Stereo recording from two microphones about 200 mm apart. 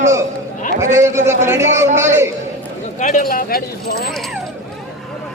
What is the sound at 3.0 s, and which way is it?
Speech, 40° left (ahead or behind).